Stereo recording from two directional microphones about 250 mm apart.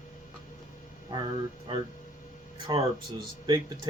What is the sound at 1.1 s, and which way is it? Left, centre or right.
Speech, centre.